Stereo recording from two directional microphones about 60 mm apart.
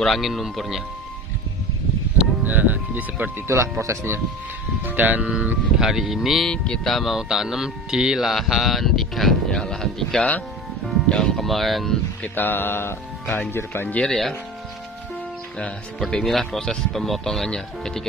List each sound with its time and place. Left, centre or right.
0.0 s speech: centre
2.4 s speech: right
3.4 s speech: right
4.8 s speech: right
5.8 s speech: centre
6.4 s speech: centre
6.9 s speech: centre
12.2 s speech: left
14.0 s speech: centre
16.1 s speech: centre